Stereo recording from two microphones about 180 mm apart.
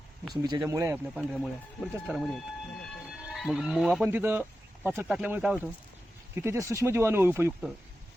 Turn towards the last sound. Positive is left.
turn(degrees=-10)  # may be behind; listen again after turning